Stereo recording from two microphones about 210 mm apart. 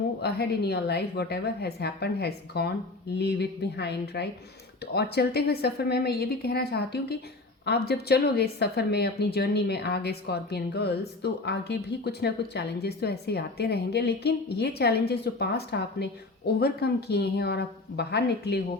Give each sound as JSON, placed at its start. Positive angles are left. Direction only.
{"t": 0.2, "sound": "speech", "side_deg": 50}